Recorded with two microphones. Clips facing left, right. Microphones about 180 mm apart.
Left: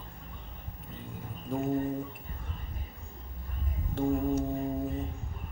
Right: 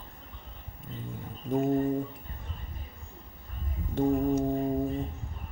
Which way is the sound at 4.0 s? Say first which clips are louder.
Right 3 dB; 15° right (ahead or behind).